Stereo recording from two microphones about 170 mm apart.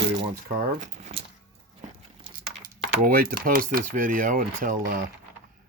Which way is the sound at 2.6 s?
60° right (ahead or behind).